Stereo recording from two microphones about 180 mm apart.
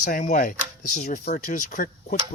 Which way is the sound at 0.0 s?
45° left (ahead or behind).